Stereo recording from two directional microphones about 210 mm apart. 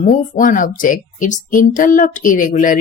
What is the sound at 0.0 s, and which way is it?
Speech, 40° left (ahead or behind).